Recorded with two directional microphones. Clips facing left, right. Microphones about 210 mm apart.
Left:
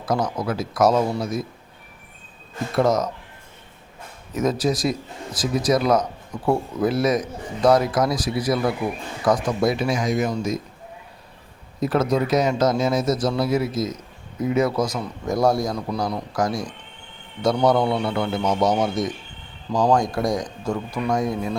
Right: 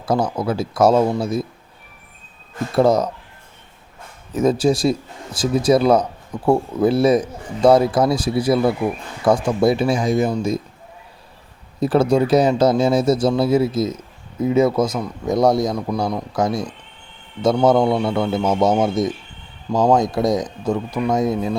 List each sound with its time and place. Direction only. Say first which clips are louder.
0.0 s a man's voice: right 4 dB; 30° right (ahead or behind)
2.7 s speech: right 4 dB; 30° right (ahead or behind)
4.4 s a man's voice: right 5 dB; 30° right (ahead or behind)
11.8 s a man's voice: right 5 dB; 30° right (ahead or behind)